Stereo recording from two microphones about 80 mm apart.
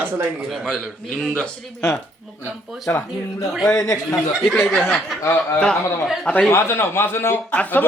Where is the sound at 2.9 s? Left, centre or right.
Left.